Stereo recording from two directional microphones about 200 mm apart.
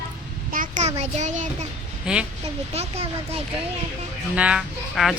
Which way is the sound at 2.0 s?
5° right (ahead or behind).